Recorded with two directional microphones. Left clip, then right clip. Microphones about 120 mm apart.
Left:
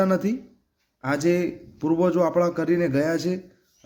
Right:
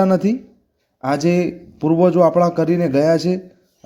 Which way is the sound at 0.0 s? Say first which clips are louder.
Right 6 dB; 35° right (ahead or behind).